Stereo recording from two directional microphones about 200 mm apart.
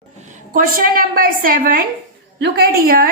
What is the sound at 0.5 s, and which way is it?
A woman's voice, 45° right (ahead or behind).